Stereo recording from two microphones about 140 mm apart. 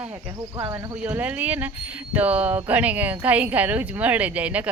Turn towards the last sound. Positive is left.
turn(degrees=-10)  # may be behind; listen again after turning